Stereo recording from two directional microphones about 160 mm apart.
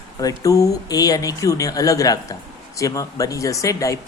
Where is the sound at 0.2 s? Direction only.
20° left (ahead or behind).